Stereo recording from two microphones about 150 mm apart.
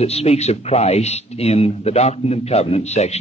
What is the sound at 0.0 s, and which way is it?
Speech, 45° left (ahead or behind).